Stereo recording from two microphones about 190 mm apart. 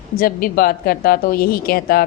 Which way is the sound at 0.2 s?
50° left (ahead or behind).